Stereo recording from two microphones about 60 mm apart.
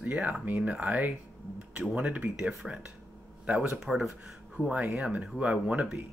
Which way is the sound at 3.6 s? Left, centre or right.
Centre.